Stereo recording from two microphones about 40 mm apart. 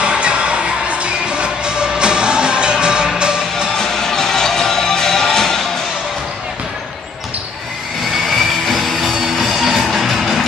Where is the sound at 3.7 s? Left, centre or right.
Centre.